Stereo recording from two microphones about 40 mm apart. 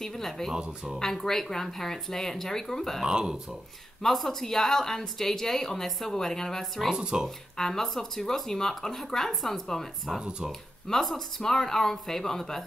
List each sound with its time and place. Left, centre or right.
0.0 s speech: centre
0.5 s speech: centre
0.9 s speech: centre
3.1 s speech: right
4.0 s speech: centre
7.0 s speech: right
7.5 s speech: centre
10.9 s speech: centre